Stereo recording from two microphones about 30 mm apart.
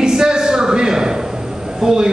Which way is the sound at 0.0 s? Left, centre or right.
Right.